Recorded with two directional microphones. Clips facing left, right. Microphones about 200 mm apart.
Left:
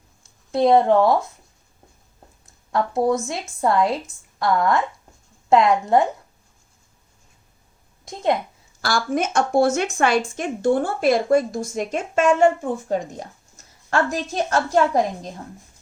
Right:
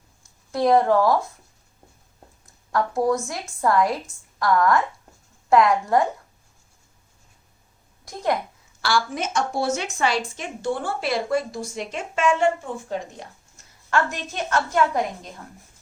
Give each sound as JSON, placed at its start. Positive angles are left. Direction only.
{"t": 0.5, "sound": "speech", "side_deg": 25}
{"t": 2.7, "sound": "a woman's voice", "side_deg": 25}
{"t": 8.0, "sound": "a woman's voice", "side_deg": 20}
{"t": 8.8, "sound": "a woman's voice", "side_deg": 45}